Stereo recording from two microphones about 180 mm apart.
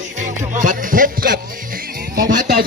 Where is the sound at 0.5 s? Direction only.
45° right (ahead or behind).